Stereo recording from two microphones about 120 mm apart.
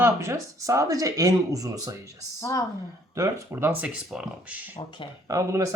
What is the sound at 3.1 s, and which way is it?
Speech, 25° right (ahead or behind).